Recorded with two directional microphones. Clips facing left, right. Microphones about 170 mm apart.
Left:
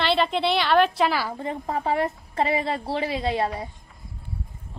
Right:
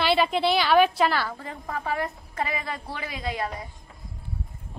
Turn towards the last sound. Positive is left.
turn(degrees=30)  # may be behind; listen again after turning